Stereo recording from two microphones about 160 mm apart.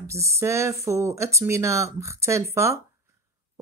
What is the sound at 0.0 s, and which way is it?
Speech, 20° right (ahead or behind).